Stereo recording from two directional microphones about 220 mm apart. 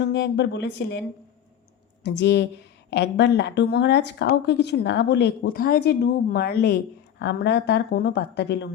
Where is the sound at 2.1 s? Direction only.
50° left (ahead or behind).